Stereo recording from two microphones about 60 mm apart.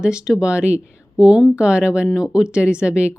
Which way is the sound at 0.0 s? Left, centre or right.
Centre.